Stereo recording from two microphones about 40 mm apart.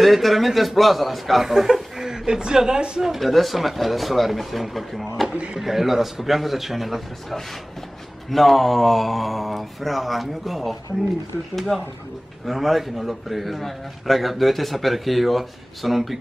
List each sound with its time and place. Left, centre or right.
0.0 s a man's voice: centre
3.0 s a man's voice: centre
5.3 s speech: right
5.6 s a man's voice: centre